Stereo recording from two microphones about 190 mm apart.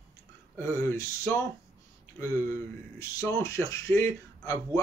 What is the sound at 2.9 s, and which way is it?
Speech, 20° left (ahead or behind).